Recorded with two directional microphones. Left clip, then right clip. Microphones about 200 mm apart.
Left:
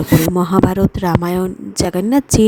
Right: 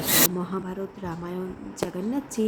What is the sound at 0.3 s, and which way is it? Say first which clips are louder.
A woman's voice: left 17 dB; 50° left (ahead or behind).